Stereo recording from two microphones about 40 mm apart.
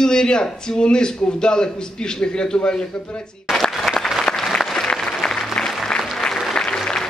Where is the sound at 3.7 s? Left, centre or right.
Centre.